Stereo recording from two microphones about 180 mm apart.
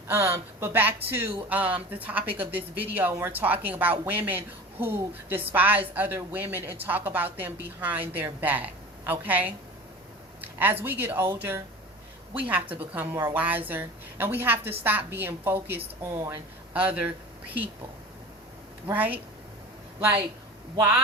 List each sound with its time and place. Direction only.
0.1 s a woman's voice: 15° right (ahead or behind)
15.8 s speech: 20° right (ahead or behind)
16.7 s a woman's voice: 5° right (ahead or behind)
18.9 s a woman's voice: 10° right (ahead or behind)
20.7 s a woman's voice: 10° right (ahead or behind)